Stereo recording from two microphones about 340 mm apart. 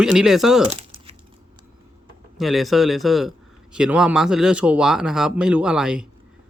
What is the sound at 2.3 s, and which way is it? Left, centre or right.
Speech, centre.